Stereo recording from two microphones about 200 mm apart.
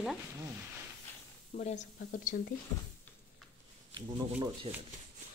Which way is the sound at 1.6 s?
35° left (ahead or behind).